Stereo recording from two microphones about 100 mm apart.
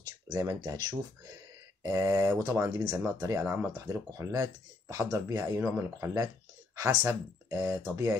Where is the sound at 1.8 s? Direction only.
30° right (ahead or behind).